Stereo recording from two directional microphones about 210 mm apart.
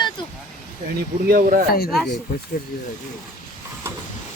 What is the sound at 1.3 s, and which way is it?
Speech, 40° right (ahead or behind).